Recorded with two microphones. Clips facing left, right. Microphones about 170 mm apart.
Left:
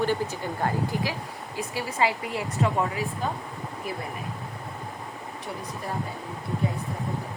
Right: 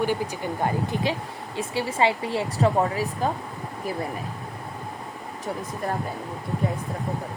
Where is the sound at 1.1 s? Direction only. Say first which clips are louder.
Right 5 dB; 25° right (ahead or behind).